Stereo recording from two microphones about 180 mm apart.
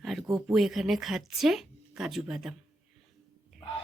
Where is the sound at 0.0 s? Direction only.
Centre (ahead or behind).